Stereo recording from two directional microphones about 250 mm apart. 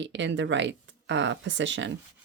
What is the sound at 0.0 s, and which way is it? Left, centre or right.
Speech, right.